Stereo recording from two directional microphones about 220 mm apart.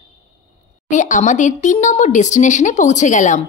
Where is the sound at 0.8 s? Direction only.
35° left (ahead or behind).